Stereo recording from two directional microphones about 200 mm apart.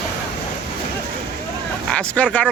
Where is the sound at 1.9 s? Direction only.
5° left (ahead or behind).